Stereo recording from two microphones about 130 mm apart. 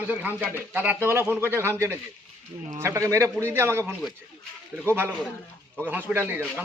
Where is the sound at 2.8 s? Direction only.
25° right (ahead or behind).